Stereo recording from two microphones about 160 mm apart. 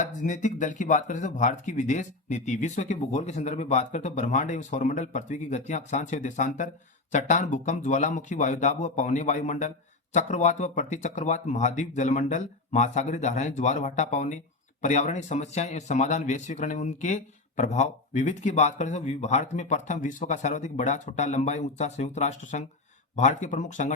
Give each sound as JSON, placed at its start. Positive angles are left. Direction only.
{"t": 0.0, "sound": "a man's voice", "side_deg": 50}